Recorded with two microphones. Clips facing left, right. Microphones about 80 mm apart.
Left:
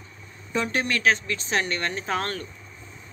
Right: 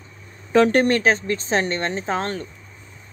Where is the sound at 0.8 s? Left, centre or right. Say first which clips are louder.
Right 5 dB; right.